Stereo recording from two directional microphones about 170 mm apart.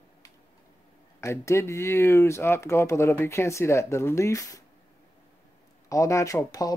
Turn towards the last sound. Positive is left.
turn(degrees=20)  # may be behind; listen again after turning